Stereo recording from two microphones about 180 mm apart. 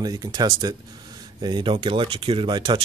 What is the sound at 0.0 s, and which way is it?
Speech, 20° right (ahead or behind).